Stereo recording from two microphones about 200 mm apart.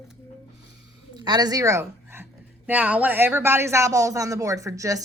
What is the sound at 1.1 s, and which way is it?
Speech, 20° right (ahead or behind).